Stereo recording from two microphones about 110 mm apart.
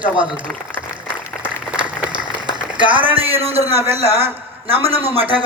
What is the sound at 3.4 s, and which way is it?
A man's voice, 65° right (ahead or behind).